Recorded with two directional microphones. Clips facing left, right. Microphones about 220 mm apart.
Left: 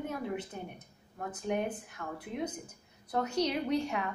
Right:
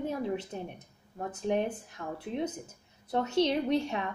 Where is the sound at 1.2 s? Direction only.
25° right (ahead or behind).